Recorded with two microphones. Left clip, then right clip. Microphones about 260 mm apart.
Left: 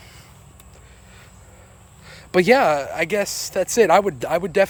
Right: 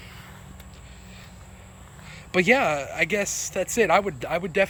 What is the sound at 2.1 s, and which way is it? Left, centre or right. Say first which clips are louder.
Speech: left 5 dB; left.